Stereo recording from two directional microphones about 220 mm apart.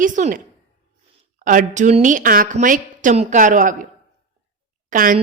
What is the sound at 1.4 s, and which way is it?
Speech, 35° right (ahead or behind).